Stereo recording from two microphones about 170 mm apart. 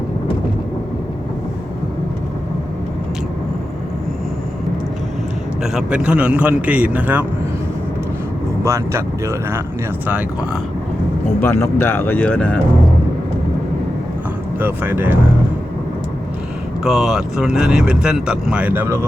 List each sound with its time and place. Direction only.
5.7 s a man's voice: 5° right (ahead or behind)
8.6 s a man's voice: 15° right (ahead or behind)
11.3 s speech: 15° left (ahead or behind)
14.6 s a man's voice: 10° right (ahead or behind)
16.8 s speech: centre (ahead or behind)